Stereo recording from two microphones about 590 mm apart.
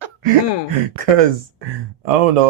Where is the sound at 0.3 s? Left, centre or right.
Right.